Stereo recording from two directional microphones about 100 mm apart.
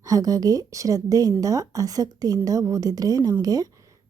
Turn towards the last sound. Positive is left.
turn(degrees=-40)  # may be behind; listen again after turning